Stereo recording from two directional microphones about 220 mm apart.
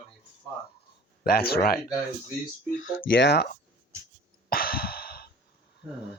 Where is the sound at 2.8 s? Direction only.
60° left (ahead or behind).